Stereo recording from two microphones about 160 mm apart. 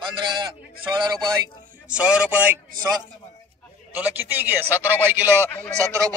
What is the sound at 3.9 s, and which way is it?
A man's voice, 10° right (ahead or behind).